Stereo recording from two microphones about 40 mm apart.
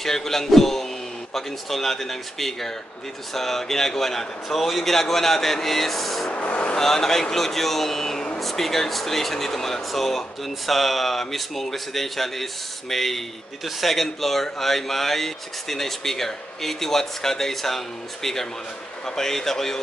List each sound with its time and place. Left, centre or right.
0.0 s speech: centre
6.3 s vehicle: left
6.8 s a man's voice: centre